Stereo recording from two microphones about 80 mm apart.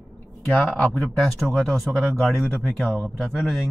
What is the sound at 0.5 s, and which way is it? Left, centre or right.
Speech, centre.